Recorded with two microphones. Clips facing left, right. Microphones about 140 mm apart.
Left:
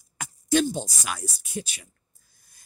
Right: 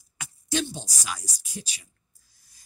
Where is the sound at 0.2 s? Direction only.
50° left (ahead or behind).